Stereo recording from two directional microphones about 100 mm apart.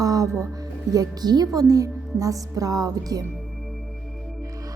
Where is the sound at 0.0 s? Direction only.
35° right (ahead or behind).